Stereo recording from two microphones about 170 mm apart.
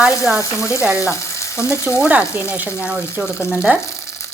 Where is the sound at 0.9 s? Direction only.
15° left (ahead or behind).